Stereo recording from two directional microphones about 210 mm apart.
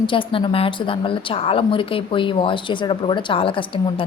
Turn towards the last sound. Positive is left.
turn(degrees=25)  # may be behind; listen again after turning